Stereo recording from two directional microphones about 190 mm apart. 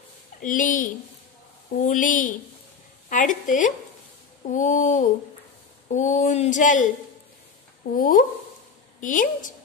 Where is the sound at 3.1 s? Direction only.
40° left (ahead or behind).